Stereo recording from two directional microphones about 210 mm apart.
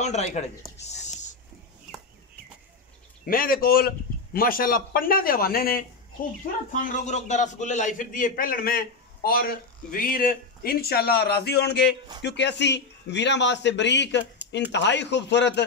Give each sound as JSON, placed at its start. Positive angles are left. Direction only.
{"t": 0.0, "sound": "speech", "side_deg": 30}
{"t": 3.3, "sound": "a man's voice", "side_deg": 45}